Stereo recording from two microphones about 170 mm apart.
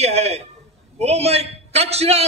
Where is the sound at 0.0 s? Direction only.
40° right (ahead or behind).